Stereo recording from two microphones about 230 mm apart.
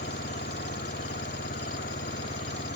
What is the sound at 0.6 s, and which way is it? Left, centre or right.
Vehicle, left.